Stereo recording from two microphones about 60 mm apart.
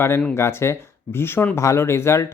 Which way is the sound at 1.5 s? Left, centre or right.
Left.